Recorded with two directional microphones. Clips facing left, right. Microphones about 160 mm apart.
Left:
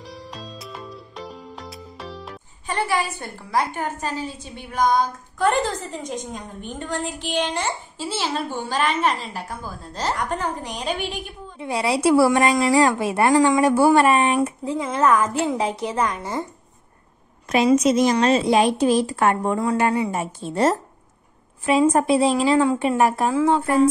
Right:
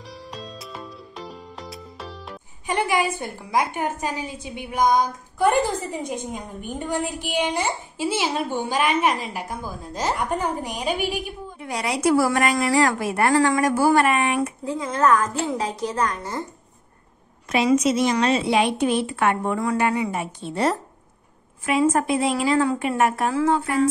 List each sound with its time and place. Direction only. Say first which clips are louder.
0.0 s music: even; centre (ahead or behind)
2.6 s a woman's voice: right 2 dB; 15° right (ahead or behind)
11.5 s a woman's voice: left 5 dB; 25° left (ahead or behind)
17.6 s a woman's voice: left 2 dB; 40° left (ahead or behind); by 23.6 s 25° left (ahead or behind)